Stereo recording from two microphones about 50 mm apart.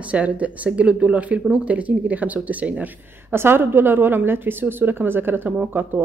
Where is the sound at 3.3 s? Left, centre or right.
Right.